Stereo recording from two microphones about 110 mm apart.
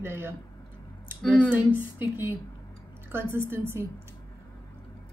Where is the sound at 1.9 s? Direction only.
20° right (ahead or behind).